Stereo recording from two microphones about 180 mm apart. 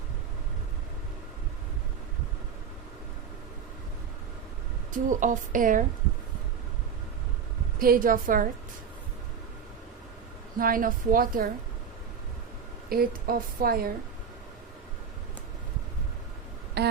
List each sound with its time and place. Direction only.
5.0 s a woman's voice: 45° right (ahead or behind)
7.8 s a woman's voice: 50° right (ahead or behind)
10.6 s a woman's voice: 50° right (ahead or behind)
12.9 s a woman's voice: 55° right (ahead or behind)
16.8 s a sound: 65° right (ahead or behind)